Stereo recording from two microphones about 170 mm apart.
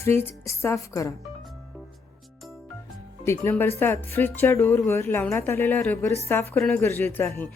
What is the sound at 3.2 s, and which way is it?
Speech, 15° left (ahead or behind).